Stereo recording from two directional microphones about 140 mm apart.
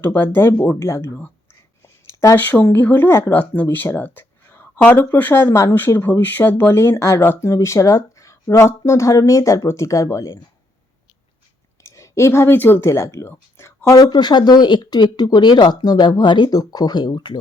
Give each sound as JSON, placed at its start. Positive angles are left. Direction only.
{"t": 0.0, "sound": "speech", "side_deg": 15}
{"t": 11.8, "sound": "speech", "side_deg": 20}